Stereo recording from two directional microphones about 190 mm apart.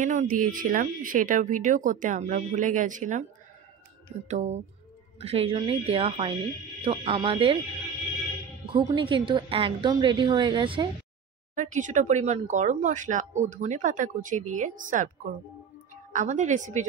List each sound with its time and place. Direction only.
0.0 s speech: 40° right (ahead or behind)
4.3 s a woman's voice: 35° right (ahead or behind)
8.7 s a woman's voice: 25° right (ahead or behind)
11.5 s speech: 40° right (ahead or behind)
16.1 s speech: 40° right (ahead or behind)